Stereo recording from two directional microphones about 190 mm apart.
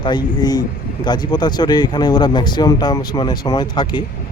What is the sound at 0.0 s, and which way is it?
A man's voice, 20° left (ahead or behind).